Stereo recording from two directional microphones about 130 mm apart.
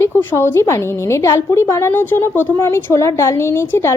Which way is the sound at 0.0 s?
15° left (ahead or behind).